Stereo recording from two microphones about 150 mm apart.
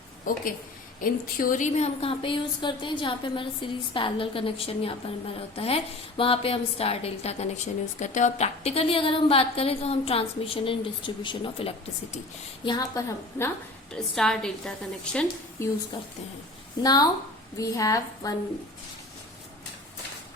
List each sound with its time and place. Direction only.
0.3 s speech: 65° left (ahead or behind)
2.0 s a woman's voice: 35° left (ahead or behind)
13.9 s a woman's voice: 5° left (ahead or behind)
16.8 s a woman's voice: 25° left (ahead or behind)